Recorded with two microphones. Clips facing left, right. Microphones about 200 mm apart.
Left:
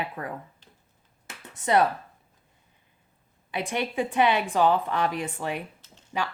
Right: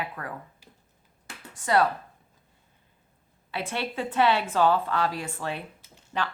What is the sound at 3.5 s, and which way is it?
A woman's voice, 15° left (ahead or behind).